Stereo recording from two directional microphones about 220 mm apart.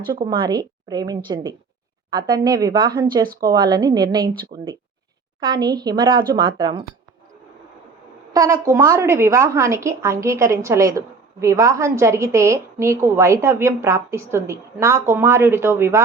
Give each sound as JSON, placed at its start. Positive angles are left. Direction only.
{"t": 0.1, "sound": "a woman's voice", "side_deg": -20}
{"t": 8.3, "sound": "a woman's voice", "side_deg": -15}